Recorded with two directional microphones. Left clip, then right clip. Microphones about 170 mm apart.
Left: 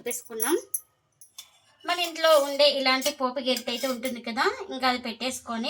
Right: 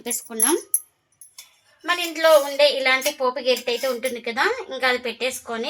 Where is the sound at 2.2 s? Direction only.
40° right (ahead or behind).